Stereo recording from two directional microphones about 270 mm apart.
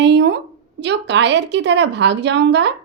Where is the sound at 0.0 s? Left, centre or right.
Right.